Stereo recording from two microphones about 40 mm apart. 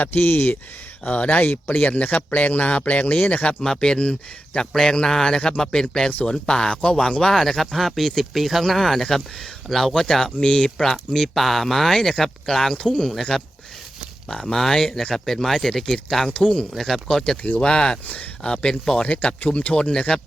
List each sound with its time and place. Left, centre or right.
0.0 s speech: left
1.0 s speech: left
1.5 s speech: left
3.6 s speech: centre
4.9 s speech: centre
7.3 s speech: centre
10.4 s speech: left
10.8 s speech: centre
13.3 s speech: centre
16.7 s speech: centre
17.6 s speech: left
18.0 s speech: left
18.4 s speech: left
19.0 s speech: left